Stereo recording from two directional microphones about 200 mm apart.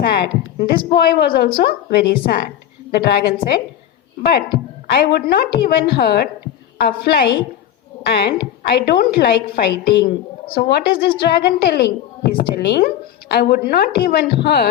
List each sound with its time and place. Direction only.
0.6 s a woman's voice: 50° left (ahead or behind)